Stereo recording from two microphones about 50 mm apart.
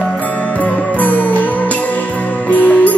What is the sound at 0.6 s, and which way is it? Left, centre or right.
Music, left.